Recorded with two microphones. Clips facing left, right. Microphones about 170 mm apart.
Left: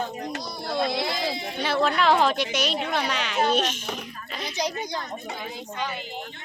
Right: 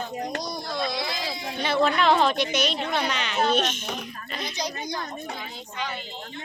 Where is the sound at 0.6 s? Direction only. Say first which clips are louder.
Left 7 dB; 60° left (ahead or behind).